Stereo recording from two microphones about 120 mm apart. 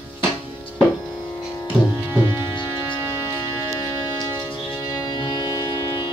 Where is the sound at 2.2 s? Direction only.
40° left (ahead or behind).